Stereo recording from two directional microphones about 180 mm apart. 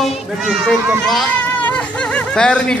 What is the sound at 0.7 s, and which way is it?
Speech, centre (ahead or behind).